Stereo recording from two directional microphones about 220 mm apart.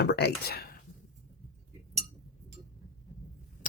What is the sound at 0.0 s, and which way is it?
Speech, 50° left (ahead or behind).